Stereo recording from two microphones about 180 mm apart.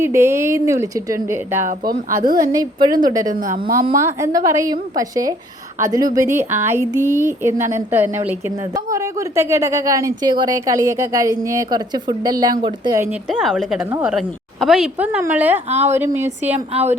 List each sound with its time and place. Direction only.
0.0 s a woman's voice: 15° right (ahead or behind)
1.6 s speech: 50° right (ahead or behind)
2.5 s a woman's voice: 25° right (ahead or behind)
3.5 s speech: 50° right (ahead or behind)
3.9 s a woman's voice: 15° right (ahead or behind)
13.3 s a woman's voice: 5° right (ahead or behind)
16.7 s speech: 40° right (ahead or behind)